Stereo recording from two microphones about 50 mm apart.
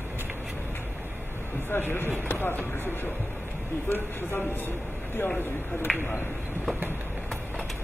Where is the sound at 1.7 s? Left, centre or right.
Left.